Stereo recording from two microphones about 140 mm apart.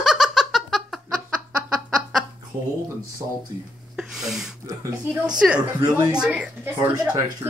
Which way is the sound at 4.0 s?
5° right (ahead or behind).